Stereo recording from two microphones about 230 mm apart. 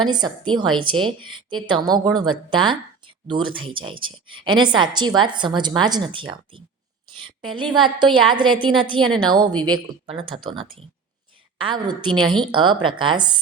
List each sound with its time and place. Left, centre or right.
0.1 s a woman's voice: centre
11.5 s a woman's voice: right